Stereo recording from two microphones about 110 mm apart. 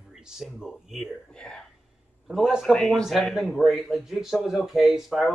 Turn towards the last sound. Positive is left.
turn(degrees=-5)  # may be behind; listen again after turning